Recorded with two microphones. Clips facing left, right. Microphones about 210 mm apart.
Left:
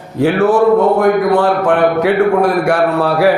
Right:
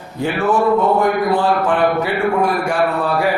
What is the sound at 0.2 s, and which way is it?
A man's voice, 65° left (ahead or behind).